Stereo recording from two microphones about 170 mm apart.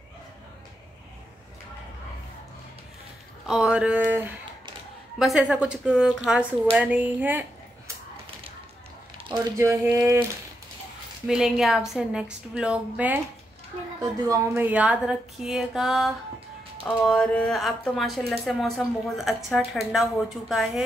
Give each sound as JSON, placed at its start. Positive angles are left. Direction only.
{"t": 3.4, "sound": "music", "side_deg": -5}
{"t": 5.2, "sound": "speech", "side_deg": 0}
{"t": 9.2, "sound": "a sound", "side_deg": -30}
{"t": 9.6, "sound": "music", "side_deg": -15}
{"t": 11.2, "sound": "speech", "side_deg": -5}
{"t": 14.2, "sound": "music", "side_deg": -20}
{"t": 16.8, "sound": "speech", "side_deg": 5}